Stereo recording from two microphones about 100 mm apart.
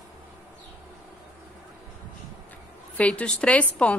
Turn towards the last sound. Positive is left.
turn(degrees=15)  # may be behind; listen again after turning